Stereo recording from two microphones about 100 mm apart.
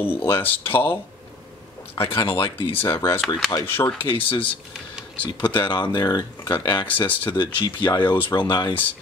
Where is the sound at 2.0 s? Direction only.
60° left (ahead or behind).